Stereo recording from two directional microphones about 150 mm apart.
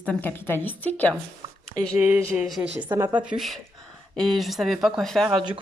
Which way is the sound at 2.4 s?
Centre (ahead or behind).